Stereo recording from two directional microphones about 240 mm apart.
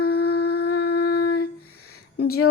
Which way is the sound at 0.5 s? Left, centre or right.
Left.